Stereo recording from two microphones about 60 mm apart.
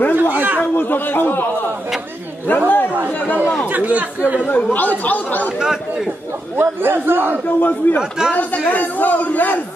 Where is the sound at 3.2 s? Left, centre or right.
Left.